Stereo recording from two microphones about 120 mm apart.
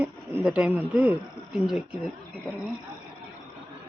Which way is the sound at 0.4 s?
10° right (ahead or behind).